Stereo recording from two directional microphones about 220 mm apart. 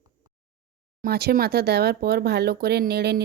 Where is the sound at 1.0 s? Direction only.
45° right (ahead or behind).